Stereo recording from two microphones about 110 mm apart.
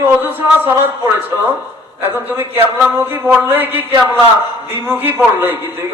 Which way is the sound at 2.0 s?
20° right (ahead or behind).